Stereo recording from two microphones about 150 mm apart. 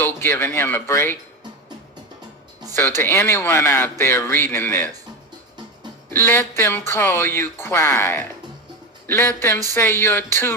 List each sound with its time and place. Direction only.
0.0 s speech: 15° left (ahead or behind)
3.0 s speech: 15° left (ahead or behind)
6.1 s speech: 15° left (ahead or behind)